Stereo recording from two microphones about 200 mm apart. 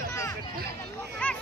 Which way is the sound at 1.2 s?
10° left (ahead or behind).